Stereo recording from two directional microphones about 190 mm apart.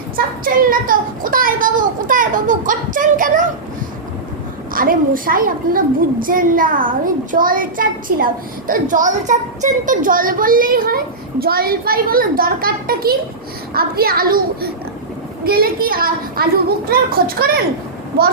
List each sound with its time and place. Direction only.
0.2 s a woman's voice: 45° right (ahead or behind)
4.7 s a woman's voice: 50° right (ahead or behind)